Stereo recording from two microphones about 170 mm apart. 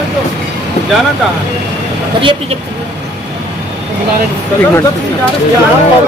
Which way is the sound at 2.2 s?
30° right (ahead or behind).